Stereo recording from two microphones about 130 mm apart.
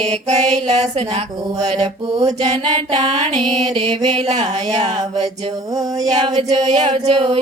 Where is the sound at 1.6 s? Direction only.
40° right (ahead or behind).